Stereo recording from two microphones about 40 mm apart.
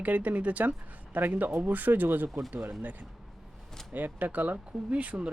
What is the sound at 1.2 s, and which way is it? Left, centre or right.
Speech, right.